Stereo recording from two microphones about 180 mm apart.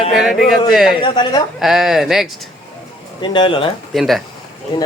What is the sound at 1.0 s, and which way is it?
Speech, 25° left (ahead or behind).